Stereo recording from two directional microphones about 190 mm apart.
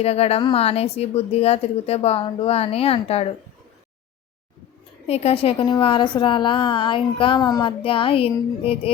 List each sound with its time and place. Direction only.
0.0 s a woman's voice: 35° left (ahead or behind)
5.0 s a woman's voice: 30° left (ahead or behind)